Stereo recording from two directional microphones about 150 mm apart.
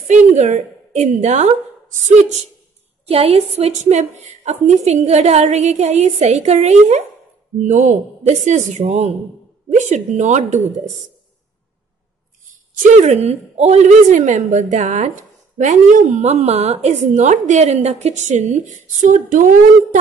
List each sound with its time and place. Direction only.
0.1 s a woman's voice: 50° right (ahead or behind)
12.9 s a woman's voice: 50° right (ahead or behind)